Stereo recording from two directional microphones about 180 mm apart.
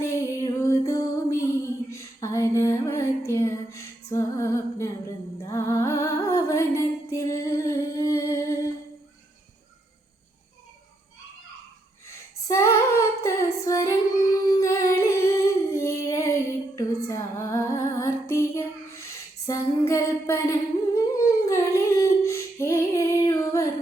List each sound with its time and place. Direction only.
0.0 s music: 15° left (ahead or behind)
1.9 s female singing: 15° left (ahead or behind)
5.5 s music: 15° left (ahead or behind)
12.0 s female singing: 15° left (ahead or behind)
14.5 s humming: 15° left (ahead or behind)
16.7 s female singing: 15° left (ahead or behind)
19.5 s humming: 15° left (ahead or behind)